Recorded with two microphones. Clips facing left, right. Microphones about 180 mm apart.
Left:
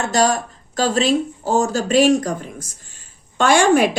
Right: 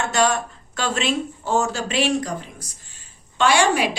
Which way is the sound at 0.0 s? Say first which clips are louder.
Left 3 dB; 35° left (ahead or behind).